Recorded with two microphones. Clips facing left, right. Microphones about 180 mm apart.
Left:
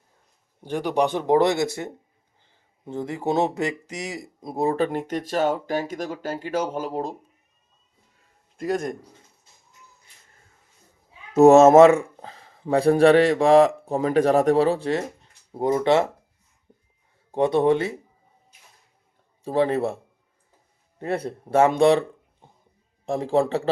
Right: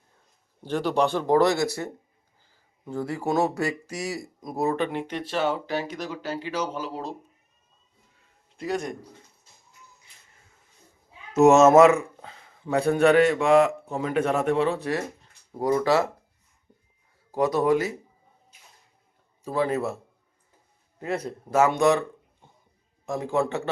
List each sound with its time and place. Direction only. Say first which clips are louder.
0.6 s speech: left 1 dB; 15° left (ahead or behind)
4.9 s speech: left 3 dB; 45° left (ahead or behind)
8.5 s a man's voice: left 3 dB; 50° left (ahead or behind)
11.3 s speech: left 3 dB; 30° left (ahead or behind)
17.3 s speech: left 3 dB; 30° left (ahead or behind)
19.5 s speech: left 4 dB; 30° left (ahead or behind)
21.0 s a man's voice: left 3 dB; 30° left (ahead or behind)